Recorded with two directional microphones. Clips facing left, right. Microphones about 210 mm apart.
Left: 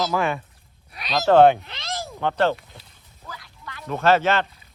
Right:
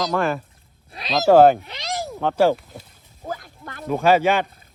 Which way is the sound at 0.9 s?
25° right (ahead or behind).